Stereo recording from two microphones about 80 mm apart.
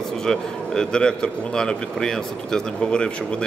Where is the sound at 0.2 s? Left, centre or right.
Centre.